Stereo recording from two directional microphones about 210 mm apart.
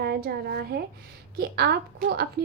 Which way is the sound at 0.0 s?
50° right (ahead or behind).